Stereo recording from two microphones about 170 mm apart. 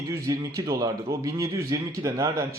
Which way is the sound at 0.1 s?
20° right (ahead or behind).